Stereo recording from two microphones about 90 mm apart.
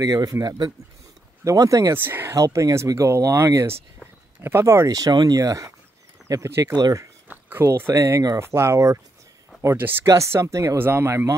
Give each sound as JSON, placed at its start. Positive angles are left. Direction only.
{"t": 0.0, "sound": "speech", "side_deg": -45}
{"t": 1.4, "sound": "speech", "side_deg": -35}
{"t": 2.0, "sound": "speech", "side_deg": -25}
{"t": 2.3, "sound": "speech", "side_deg": -35}
{"t": 4.8, "sound": "speech", "side_deg": -45}
{"t": 7.2, "sound": "a sound", "side_deg": -20}
{"t": 7.6, "sound": "speech", "side_deg": -30}
{"t": 8.4, "sound": "speech", "side_deg": -30}
{"t": 10.0, "sound": "speech", "side_deg": -35}